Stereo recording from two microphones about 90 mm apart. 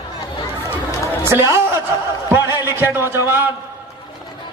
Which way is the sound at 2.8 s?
25° right (ahead or behind).